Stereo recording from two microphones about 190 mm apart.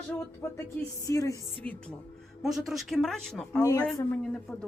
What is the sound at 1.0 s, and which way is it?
Speech, 15° left (ahead or behind).